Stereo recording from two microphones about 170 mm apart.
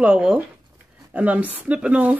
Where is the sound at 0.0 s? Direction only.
5° right (ahead or behind).